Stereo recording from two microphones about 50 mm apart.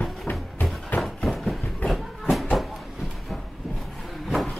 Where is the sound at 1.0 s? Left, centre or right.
Centre.